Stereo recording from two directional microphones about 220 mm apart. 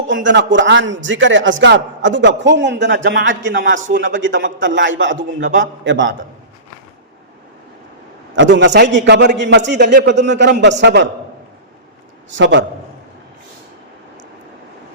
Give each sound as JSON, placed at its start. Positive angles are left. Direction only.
{"t": 0.1, "sound": "a man's voice", "side_deg": -55}
{"t": 8.4, "sound": "a man's voice", "side_deg": -55}
{"t": 12.3, "sound": "a man's voice", "side_deg": -55}